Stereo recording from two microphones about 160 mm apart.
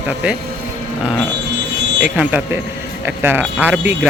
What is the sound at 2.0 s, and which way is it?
Speech, 5° right (ahead or behind).